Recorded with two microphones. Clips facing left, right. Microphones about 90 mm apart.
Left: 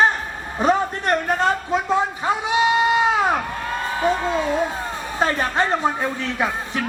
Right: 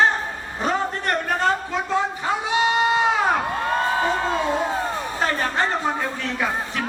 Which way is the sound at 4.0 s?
20° right (ahead or behind).